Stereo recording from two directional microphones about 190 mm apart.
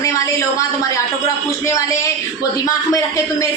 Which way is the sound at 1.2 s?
15° left (ahead or behind).